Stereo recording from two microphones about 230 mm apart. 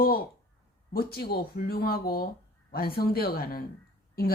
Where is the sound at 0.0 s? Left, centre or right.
Left.